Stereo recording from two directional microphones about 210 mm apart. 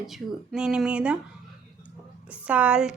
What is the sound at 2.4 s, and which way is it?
Speech, 5° right (ahead or behind).